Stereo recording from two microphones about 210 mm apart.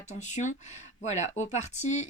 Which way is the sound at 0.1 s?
35° left (ahead or behind).